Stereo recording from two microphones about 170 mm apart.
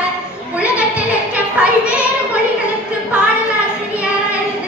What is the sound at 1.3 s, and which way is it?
Music, 10° right (ahead or behind).